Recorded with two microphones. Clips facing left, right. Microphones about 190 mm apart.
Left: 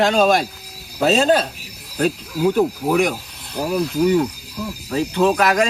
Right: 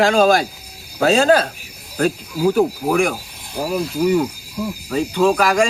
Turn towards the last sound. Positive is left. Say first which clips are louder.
# right 1 dB
turn(degrees=0)  # may be behind; listen again after turning